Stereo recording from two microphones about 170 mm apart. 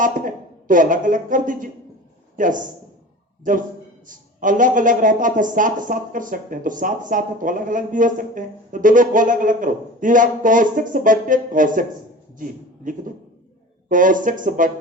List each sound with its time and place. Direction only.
0.0 s a man's voice: 50° right (ahead or behind)